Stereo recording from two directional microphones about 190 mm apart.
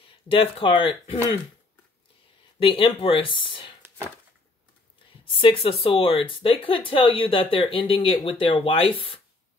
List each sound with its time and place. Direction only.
0.3 s speech: 30° left (ahead or behind)
2.6 s speech: 25° left (ahead or behind)
5.2 s speech: 30° left (ahead or behind)